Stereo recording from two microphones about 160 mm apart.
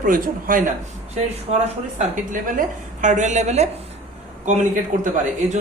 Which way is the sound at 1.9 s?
55° right (ahead or behind).